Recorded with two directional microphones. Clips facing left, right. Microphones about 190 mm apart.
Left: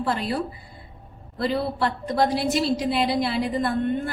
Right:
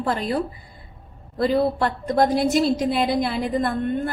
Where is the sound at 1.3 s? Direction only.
50° right (ahead or behind).